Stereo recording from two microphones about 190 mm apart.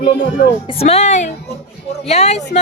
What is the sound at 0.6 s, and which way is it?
A woman's voice, 30° left (ahead or behind).